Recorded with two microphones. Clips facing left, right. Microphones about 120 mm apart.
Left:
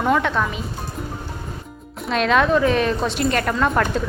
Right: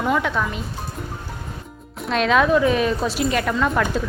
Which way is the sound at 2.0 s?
Centre (ahead or behind).